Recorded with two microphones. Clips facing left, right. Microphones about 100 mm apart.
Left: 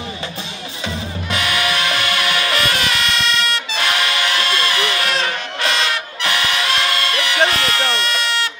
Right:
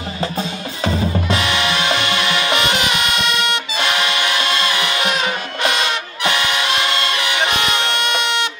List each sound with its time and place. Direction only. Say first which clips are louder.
0.2 s drum: right 6 dB; 40° right (ahead or behind); by 8.5 s 20° right (ahead or behind)